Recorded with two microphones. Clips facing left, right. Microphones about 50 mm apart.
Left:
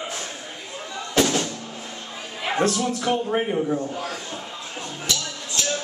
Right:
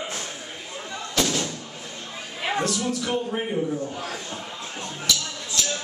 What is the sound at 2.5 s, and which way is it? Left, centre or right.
A man's voice, left.